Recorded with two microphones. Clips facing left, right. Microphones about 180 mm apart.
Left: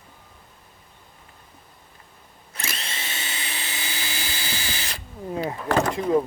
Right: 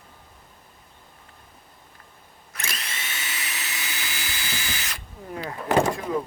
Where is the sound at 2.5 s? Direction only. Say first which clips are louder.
Left 2 dB; 25° left (ahead or behind).